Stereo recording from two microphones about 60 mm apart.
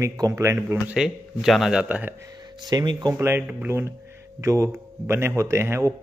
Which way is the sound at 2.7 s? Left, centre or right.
Right.